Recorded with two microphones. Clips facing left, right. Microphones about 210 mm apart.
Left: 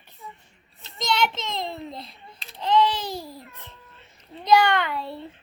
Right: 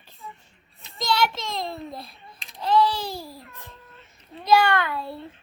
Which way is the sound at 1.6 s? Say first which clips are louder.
Even; 20° left (ahead or behind).